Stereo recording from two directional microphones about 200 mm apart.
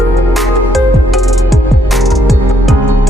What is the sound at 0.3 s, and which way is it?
Music, centre (ahead or behind).